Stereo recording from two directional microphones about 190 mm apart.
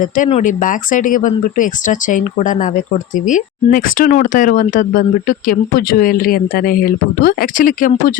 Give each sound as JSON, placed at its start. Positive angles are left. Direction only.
{"t": 0.3, "sound": "speech", "side_deg": 40}